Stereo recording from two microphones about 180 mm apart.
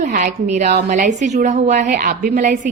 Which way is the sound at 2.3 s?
45° right (ahead or behind).